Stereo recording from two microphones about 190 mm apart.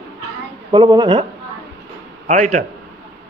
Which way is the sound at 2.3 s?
40° right (ahead or behind).